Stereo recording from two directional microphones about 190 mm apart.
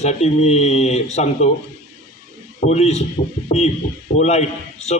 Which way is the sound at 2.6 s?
35° left (ahead or behind).